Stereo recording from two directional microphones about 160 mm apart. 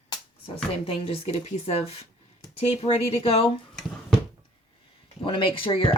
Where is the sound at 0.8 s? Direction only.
40° left (ahead or behind).